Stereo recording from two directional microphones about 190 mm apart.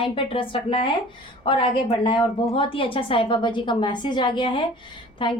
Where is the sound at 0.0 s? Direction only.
25° left (ahead or behind).